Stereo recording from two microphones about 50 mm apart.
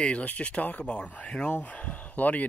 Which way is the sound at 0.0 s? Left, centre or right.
Left.